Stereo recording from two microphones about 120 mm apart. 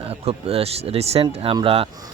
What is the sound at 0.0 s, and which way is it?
Speech, 55° right (ahead or behind).